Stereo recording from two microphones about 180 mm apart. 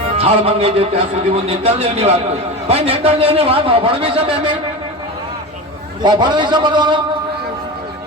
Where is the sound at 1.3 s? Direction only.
35° right (ahead or behind).